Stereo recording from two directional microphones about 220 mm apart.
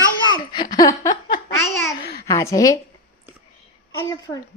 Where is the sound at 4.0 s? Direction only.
15° left (ahead or behind).